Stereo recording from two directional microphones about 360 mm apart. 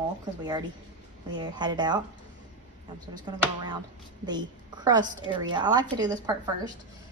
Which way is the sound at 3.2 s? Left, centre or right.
Centre.